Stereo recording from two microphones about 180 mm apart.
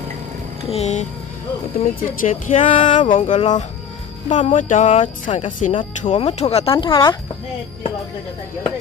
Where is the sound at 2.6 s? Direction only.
30° left (ahead or behind).